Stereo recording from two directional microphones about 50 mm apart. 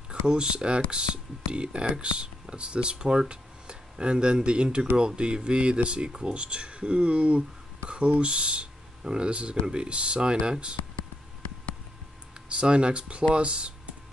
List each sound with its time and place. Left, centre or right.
0.1 s speech: centre
12.4 s speech: right